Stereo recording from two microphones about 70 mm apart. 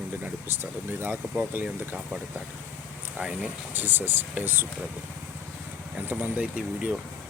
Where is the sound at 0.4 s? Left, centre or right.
Right.